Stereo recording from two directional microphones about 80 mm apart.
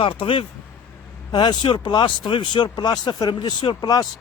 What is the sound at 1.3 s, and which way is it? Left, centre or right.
Speech, left.